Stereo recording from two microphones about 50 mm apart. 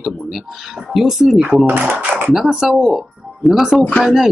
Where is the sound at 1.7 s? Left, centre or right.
Right.